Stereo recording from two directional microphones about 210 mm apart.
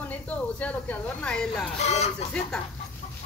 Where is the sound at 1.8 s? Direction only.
30° left (ahead or behind).